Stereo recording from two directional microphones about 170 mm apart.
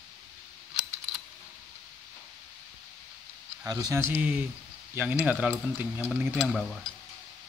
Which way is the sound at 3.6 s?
20° right (ahead or behind).